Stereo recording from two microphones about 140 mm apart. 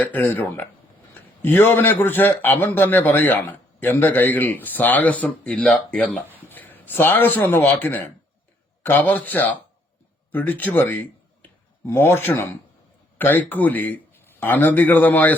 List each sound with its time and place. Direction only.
0.0 s a man's voice: 10° left (ahead or behind)